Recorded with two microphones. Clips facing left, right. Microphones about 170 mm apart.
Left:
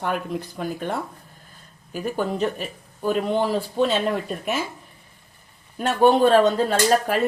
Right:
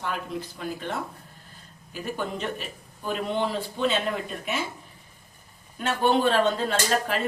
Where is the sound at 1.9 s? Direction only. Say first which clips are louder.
Left 6 dB; 45° left (ahead or behind).